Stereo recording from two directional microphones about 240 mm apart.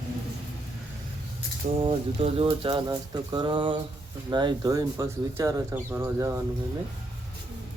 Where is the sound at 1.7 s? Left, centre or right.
Right.